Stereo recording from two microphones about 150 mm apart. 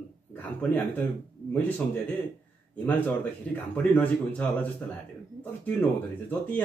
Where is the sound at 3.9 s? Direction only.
10° left (ahead or behind).